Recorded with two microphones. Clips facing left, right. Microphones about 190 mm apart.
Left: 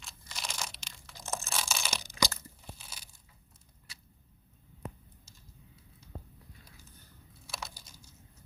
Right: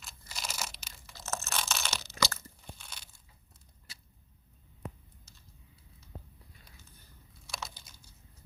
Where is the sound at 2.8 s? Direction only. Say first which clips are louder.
Even; 5° left (ahead or behind).